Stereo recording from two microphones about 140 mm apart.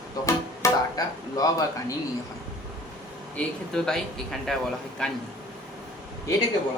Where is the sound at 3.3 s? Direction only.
5° left (ahead or behind).